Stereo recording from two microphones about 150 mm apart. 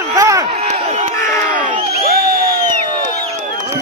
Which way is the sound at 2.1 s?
90° right.